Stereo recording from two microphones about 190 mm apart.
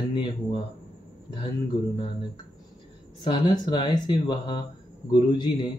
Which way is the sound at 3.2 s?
25° left (ahead or behind).